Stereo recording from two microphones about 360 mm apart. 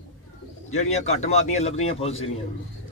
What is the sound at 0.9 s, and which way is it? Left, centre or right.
A man's voice, centre.